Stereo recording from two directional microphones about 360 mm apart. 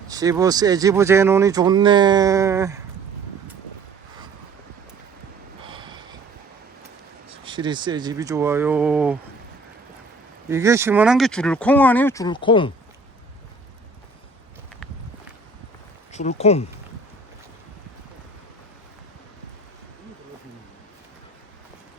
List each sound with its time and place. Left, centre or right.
0.1 s speech: centre
5.6 s a sound: centre
7.3 s speech: centre
10.5 s speech: centre
16.1 s speech: centre